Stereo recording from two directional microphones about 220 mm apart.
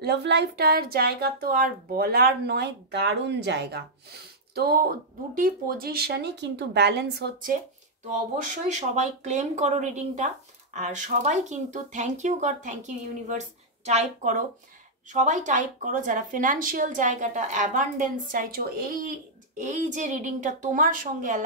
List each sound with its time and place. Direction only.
0.0 s speech: 50° right (ahead or behind)
8.4 s speech: 35° right (ahead or behind)